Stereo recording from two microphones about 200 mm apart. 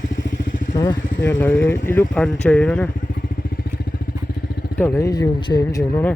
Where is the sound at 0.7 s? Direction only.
20° left (ahead or behind).